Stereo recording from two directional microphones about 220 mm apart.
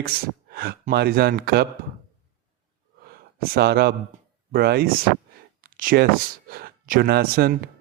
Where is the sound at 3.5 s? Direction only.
45° right (ahead or behind).